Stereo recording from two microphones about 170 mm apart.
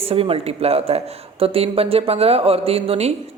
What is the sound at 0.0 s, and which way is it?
Speech, 35° right (ahead or behind).